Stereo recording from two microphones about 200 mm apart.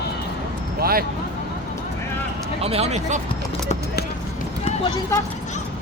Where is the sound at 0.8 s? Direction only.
50° right (ahead or behind).